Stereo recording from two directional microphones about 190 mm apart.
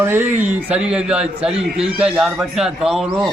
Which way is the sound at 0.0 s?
10° right (ahead or behind).